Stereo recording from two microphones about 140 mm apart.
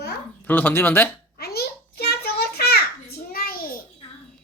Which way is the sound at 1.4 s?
90° left.